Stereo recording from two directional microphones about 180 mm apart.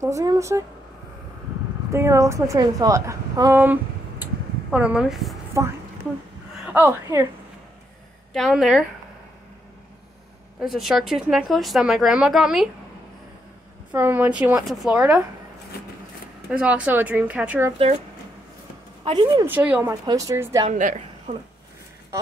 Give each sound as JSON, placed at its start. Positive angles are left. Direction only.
{"t": 0.0, "sound": "speech", "side_deg": -20}
{"t": 1.9, "sound": "a woman's voice", "side_deg": -15}
{"t": 5.5, "sound": "speech", "side_deg": -15}
{"t": 8.3, "sound": "a woman's voice", "side_deg": 0}
{"t": 10.6, "sound": "a woman's voice", "side_deg": 0}
{"t": 13.9, "sound": "speech", "side_deg": -10}
{"t": 16.4, "sound": "speech", "side_deg": -5}
{"t": 19.0, "sound": "speech", "side_deg": -25}
{"t": 19.4, "sound": "speech", "side_deg": -10}
{"t": 20.7, "sound": "a woman's voice", "side_deg": -45}